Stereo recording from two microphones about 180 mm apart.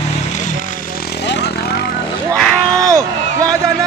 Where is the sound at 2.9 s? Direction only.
20° right (ahead or behind).